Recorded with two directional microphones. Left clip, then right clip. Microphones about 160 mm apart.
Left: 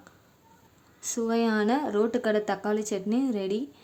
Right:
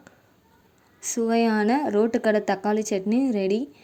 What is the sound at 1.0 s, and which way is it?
Speech, 20° right (ahead or behind).